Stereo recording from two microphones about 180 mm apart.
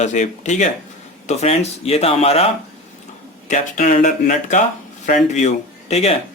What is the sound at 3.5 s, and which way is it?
Speech, 45° left (ahead or behind).